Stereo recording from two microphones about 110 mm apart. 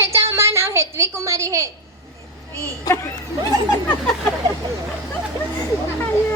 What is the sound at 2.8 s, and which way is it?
Speech, 25° left (ahead or behind).